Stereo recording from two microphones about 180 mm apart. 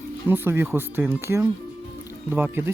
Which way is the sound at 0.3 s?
10° right (ahead or behind).